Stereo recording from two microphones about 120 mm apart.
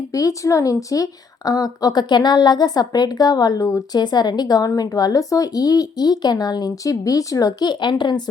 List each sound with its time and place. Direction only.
0.1 s a woman's voice: 30° left (ahead or behind)